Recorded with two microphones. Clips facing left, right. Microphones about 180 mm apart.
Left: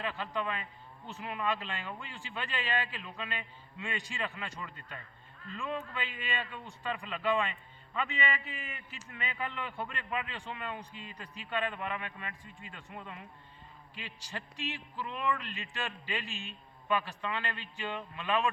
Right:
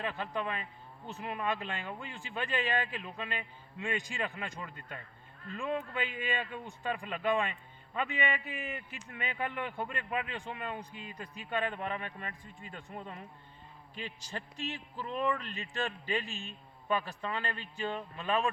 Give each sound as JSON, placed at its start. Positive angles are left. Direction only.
{"t": 0.0, "sound": "speech", "side_deg": -50}
{"t": 14.7, "sound": "speech", "side_deg": -40}